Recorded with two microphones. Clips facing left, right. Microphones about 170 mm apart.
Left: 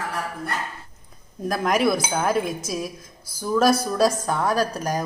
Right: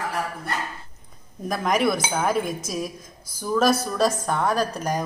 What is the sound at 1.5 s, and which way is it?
A woman's voice, 5° left (ahead or behind).